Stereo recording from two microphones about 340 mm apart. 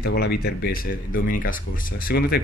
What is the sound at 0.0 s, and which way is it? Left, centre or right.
Speech, left.